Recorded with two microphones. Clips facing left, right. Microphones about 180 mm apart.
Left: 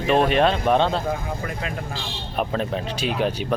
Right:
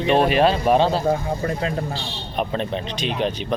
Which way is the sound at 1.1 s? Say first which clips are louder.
Right 5 dB; 30° right (ahead or behind).